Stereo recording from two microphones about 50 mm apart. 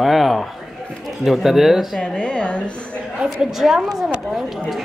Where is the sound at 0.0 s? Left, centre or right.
Centre.